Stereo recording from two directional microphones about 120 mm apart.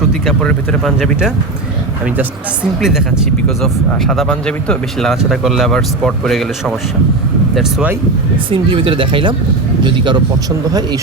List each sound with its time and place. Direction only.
0.3 s speech: 5° left (ahead or behind)
2.8 s speech: 5° right (ahead or behind)
8.4 s speech: 45° right (ahead or behind)